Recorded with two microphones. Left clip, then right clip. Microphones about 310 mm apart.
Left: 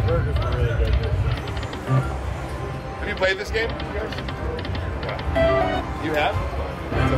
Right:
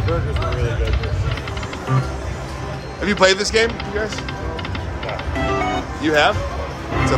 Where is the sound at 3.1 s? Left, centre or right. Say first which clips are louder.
Right 8 dB; right.